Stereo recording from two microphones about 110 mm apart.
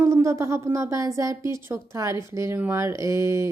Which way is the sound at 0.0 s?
25° right (ahead or behind).